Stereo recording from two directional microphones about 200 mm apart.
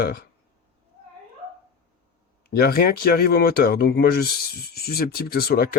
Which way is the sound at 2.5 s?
50° left (ahead or behind).